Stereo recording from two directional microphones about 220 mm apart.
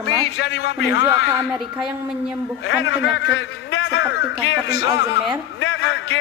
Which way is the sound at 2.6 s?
55° left (ahead or behind).